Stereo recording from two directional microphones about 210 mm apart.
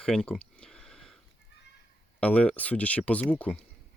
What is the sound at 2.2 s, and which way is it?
Speech, 5° left (ahead or behind).